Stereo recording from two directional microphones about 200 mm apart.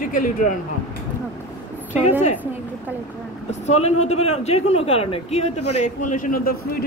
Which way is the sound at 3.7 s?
35° left (ahead or behind).